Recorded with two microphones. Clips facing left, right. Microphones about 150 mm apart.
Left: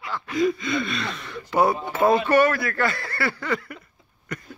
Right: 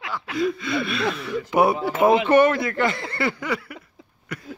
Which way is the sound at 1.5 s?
20° right (ahead or behind).